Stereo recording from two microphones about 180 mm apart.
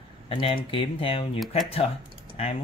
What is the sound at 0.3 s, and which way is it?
Speech, 30° left (ahead or behind).